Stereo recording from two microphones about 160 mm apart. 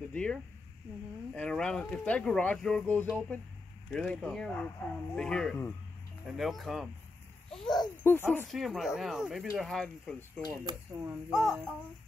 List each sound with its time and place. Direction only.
0.1 s speech: 5° left (ahead or behind)
8.5 s speech: centre (ahead or behind)
10.6 s speech: 20° right (ahead or behind)
11.3 s speech: centre (ahead or behind)